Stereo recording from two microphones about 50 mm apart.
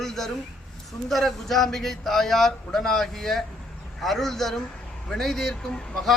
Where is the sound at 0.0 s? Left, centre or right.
Centre.